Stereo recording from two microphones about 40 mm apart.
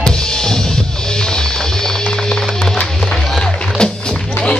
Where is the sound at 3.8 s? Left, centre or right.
Centre.